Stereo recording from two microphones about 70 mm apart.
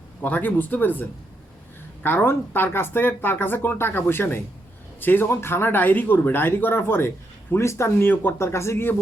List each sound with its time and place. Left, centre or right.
0.2 s speech: left
2.0 s speech: left